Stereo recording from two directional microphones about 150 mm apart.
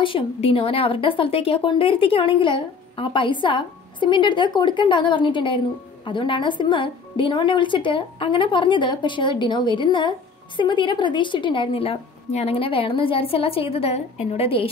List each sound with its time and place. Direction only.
0.0 s a woman's voice: 40° left (ahead or behind)